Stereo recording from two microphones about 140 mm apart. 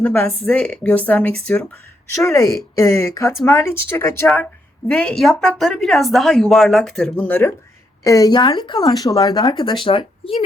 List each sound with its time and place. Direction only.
0.0 s a woman's voice: 10° left (ahead or behind)
2.2 s a woman's voice: 20° left (ahead or behind)
8.0 s speech: 25° left (ahead or behind)